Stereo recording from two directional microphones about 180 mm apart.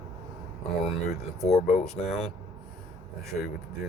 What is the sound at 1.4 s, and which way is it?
Speech, 35° left (ahead or behind).